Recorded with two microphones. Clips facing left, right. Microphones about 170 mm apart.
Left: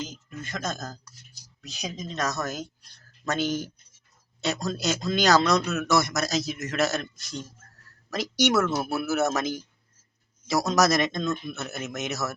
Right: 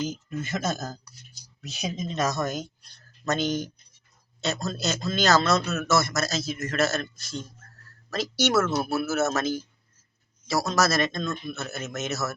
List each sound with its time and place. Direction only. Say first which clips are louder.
0.1 s a man's voice: right 6 dB; 5° right (ahead or behind); by 12.3 s 15° left (ahead or behind)